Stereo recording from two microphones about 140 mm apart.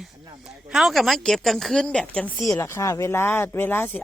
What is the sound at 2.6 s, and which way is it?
Speech, 20° left (ahead or behind).